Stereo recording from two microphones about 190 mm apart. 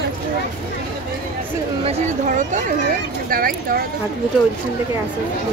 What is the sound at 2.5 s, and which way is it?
Speech, 50° right (ahead or behind).